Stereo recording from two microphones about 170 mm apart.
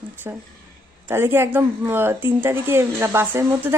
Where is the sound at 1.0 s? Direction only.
15° right (ahead or behind).